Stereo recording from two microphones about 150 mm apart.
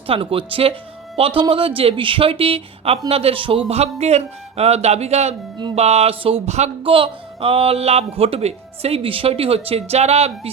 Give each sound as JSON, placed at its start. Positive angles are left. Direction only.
{"t": 0.1, "sound": "speech", "side_deg": -35}